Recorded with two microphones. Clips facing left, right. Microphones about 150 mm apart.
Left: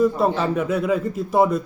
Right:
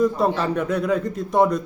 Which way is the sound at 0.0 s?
5° left (ahead or behind).